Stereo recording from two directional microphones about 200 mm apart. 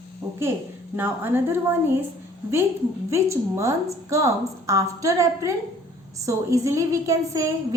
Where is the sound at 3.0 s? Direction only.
15° right (ahead or behind).